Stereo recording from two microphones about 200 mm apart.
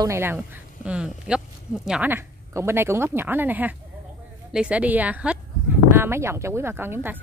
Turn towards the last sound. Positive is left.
turn(degrees=-10)  # may be behind; listen again after turning